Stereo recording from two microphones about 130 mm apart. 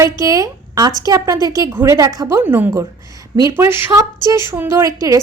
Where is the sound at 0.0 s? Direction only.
25° right (ahead or behind).